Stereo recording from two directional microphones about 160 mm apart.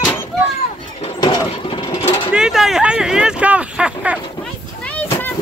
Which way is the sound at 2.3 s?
5° right (ahead or behind).